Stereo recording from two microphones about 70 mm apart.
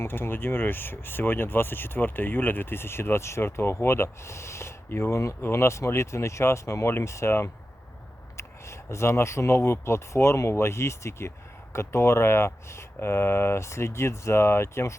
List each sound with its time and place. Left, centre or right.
0.0 s speech: left